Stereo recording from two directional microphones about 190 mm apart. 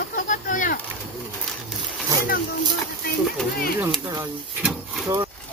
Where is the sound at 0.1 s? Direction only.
40° left (ahead or behind).